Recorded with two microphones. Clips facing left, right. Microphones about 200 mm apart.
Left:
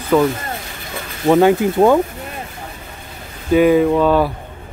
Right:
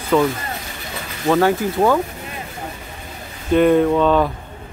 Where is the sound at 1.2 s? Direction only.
15° left (ahead or behind).